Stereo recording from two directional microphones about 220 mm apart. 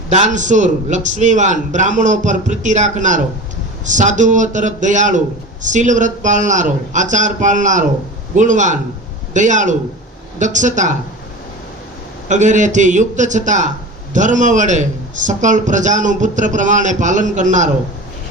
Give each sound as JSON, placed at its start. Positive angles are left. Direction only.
{"t": 0.1, "sound": "a man's voice", "side_deg": -35}
{"t": 12.3, "sound": "a man's voice", "side_deg": -35}